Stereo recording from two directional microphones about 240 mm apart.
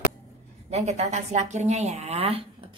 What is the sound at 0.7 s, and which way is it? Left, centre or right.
A woman's voice, right.